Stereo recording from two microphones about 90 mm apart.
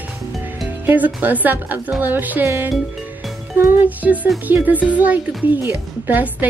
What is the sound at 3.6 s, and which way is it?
A woman's voice, 15° right (ahead or behind).